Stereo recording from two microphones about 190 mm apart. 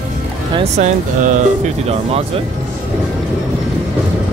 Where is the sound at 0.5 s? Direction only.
35° right (ahead or behind).